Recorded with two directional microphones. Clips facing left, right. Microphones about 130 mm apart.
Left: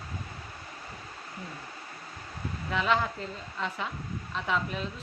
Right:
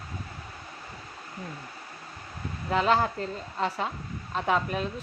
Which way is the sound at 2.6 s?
40° right (ahead or behind).